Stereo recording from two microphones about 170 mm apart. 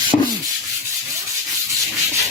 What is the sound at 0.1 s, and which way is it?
Rub, 30° left (ahead or behind).